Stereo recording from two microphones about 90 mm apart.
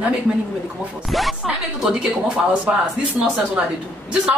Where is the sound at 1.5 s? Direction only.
10° right (ahead or behind).